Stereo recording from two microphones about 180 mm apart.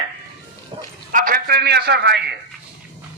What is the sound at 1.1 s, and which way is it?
A man's voice, 50° right (ahead or behind).